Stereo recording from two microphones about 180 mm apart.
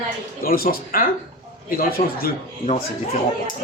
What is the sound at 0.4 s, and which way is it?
Speech, 55° left (ahead or behind).